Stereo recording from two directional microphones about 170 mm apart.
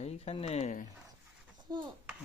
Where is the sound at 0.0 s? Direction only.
35° left (ahead or behind).